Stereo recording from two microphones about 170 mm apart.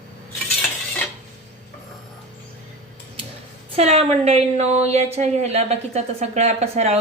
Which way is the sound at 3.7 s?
35° right (ahead or behind).